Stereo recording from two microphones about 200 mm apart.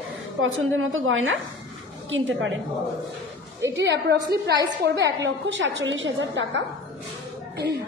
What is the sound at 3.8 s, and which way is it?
A woman's voice, 60° right (ahead or behind).